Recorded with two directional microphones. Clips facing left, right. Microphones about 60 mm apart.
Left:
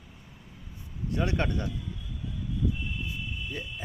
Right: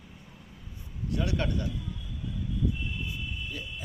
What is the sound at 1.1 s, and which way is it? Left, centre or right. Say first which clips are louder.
Speech: left 1 dB; left.